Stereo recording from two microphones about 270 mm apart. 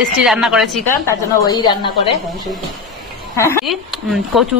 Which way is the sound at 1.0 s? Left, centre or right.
Centre.